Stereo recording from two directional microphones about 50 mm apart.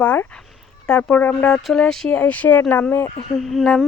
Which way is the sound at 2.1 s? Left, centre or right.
Left.